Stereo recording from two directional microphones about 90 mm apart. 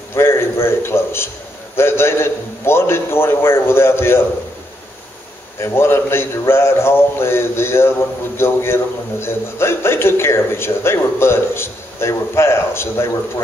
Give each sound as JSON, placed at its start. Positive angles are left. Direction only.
{"t": 0.1, "sound": "a man's voice", "side_deg": 30}
{"t": 5.6, "sound": "a man's voice", "side_deg": 30}